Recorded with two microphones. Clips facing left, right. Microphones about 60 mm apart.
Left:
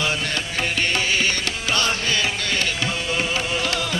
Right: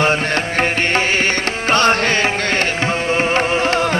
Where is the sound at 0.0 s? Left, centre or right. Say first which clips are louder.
Right 8 dB; right.